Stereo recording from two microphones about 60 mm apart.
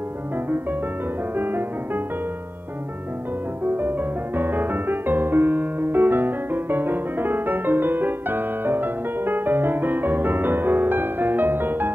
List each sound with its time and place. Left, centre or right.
3.6 s music: right